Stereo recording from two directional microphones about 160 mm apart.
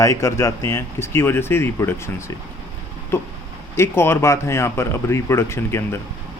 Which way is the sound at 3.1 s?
15° left (ahead or behind).